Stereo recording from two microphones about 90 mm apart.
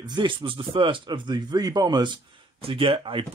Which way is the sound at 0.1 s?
55° right (ahead or behind).